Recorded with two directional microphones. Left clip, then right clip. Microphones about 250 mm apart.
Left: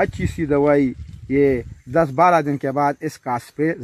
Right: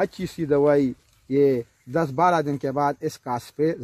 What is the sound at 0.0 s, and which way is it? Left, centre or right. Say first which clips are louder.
Speech: left 4 dB; left.